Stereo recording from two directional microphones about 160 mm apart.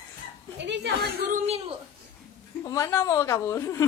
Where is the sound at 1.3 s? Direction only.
45° right (ahead or behind).